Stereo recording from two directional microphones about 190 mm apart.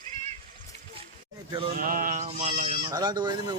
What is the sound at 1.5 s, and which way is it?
Sheep, 25° right (ahead or behind).